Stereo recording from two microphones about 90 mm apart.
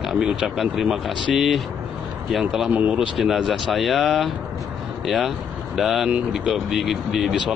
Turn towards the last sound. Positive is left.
turn(degrees=-5)  # may be behind; listen again after turning